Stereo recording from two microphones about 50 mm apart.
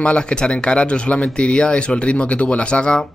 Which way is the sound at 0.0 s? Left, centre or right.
Left.